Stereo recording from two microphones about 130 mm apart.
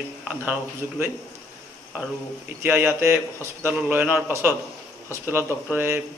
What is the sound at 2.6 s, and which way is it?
A man's voice, 15° right (ahead or behind).